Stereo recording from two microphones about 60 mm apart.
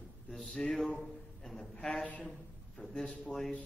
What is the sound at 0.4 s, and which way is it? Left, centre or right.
Speech, centre.